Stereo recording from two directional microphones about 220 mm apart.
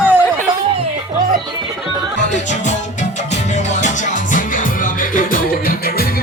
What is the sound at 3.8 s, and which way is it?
Music, 35° left (ahead or behind).